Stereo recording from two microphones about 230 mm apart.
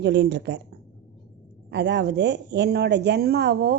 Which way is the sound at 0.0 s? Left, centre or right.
Right.